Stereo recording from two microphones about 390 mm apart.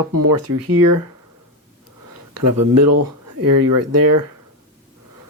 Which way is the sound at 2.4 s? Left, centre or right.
Right.